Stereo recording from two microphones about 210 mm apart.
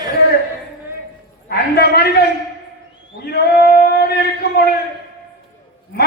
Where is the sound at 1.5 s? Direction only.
50° left (ahead or behind).